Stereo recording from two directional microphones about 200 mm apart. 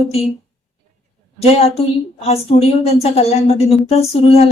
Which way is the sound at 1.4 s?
30° left (ahead or behind).